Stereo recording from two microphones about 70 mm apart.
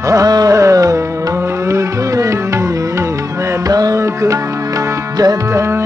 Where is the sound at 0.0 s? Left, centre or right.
Right.